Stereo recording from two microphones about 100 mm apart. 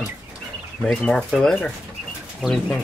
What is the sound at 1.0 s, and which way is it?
Speech, 5° left (ahead or behind).